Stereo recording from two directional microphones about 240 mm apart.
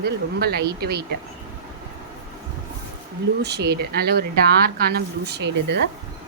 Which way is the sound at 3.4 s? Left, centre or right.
Right.